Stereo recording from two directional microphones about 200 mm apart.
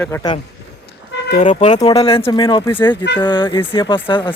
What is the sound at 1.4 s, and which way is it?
Speech, 35° left (ahead or behind).